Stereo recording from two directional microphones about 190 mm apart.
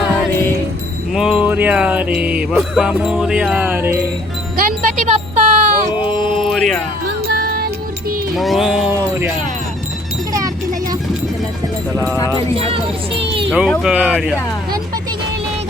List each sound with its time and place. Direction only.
1.1 s music: 5° right (ahead or behind)
4.8 s music: 45° right (ahead or behind)
6.0 s music: 25° left (ahead or behind)
6.4 s music: centre (ahead or behind)
7.3 s music: 55° right (ahead or behind)
8.4 s music: centre (ahead or behind)
12.1 s speech: 15° left (ahead or behind)
12.5 s speech: 30° right (ahead or behind)
13.5 s music: 5° right (ahead or behind)